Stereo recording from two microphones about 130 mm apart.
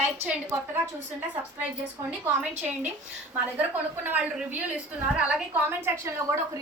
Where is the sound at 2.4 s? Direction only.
10° right (ahead or behind).